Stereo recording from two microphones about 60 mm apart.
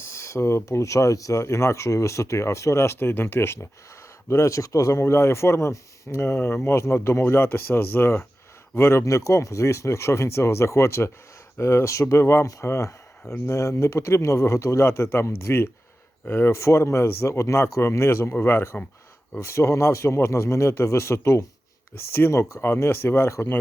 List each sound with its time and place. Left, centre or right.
0.0 s speech: left
4.3 s speech: left
16.5 s speech: left